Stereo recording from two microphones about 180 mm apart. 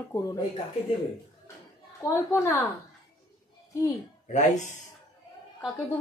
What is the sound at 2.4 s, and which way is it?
Speech, 15° left (ahead or behind).